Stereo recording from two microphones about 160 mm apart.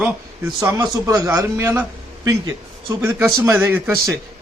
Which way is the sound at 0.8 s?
20° right (ahead or behind).